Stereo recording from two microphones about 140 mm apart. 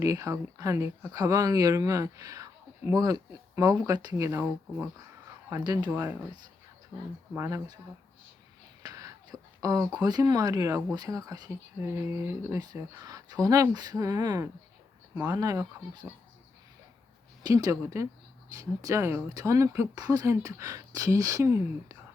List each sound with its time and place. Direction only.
0.0 s speech: 25° right (ahead or behind)
7.3 s speech: 20° right (ahead or behind)
8.8 s speech: 25° right (ahead or behind)
17.4 s speech: 25° right (ahead or behind)